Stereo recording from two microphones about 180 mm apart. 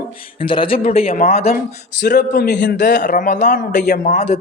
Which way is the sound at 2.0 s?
65° left (ahead or behind).